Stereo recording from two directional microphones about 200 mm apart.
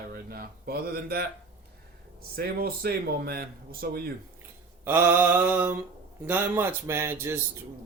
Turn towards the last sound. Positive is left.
turn(degrees=-15)  # may be behind; listen again after turning